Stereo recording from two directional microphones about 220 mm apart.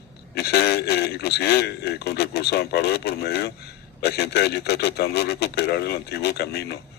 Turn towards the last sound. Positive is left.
turn(degrees=45)  # may be behind; listen again after turning